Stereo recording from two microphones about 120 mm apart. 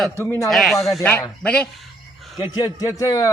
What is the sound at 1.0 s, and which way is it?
Speech, 15° left (ahead or behind).